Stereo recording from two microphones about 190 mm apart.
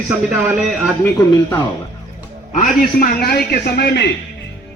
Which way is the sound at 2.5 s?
50° left (ahead or behind).